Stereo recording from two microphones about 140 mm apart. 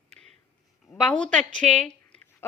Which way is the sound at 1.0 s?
5° left (ahead or behind).